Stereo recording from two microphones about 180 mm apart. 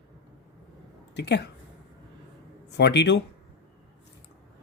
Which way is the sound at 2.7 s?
70° left (ahead or behind).